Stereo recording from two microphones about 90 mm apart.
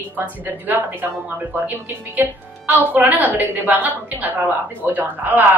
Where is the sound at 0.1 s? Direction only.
20° right (ahead or behind).